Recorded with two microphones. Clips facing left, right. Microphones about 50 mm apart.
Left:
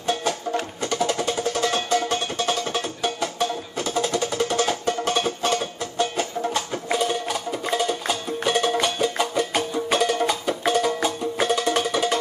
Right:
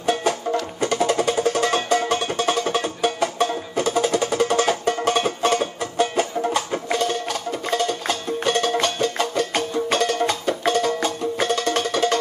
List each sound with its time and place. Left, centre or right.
0.0 s music: right
6.9 s music: centre